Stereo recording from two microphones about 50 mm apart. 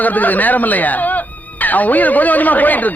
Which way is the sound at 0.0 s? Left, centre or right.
Left.